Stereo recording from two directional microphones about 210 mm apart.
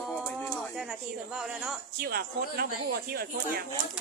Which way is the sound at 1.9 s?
45° right (ahead or behind).